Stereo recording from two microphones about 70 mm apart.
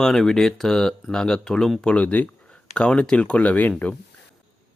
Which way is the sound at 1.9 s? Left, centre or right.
Left.